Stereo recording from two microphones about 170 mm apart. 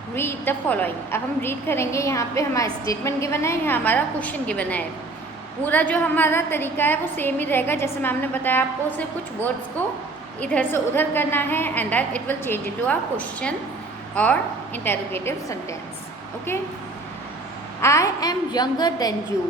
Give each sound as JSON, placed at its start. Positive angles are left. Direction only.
{"t": 0.2, "sound": "a woman's voice", "side_deg": 15}
{"t": 14.8, "sound": "a woman's voice", "side_deg": 15}
{"t": 17.7, "sound": "a woman's voice", "side_deg": 15}